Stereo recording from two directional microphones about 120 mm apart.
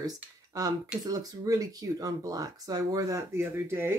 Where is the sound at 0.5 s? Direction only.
30° right (ahead or behind).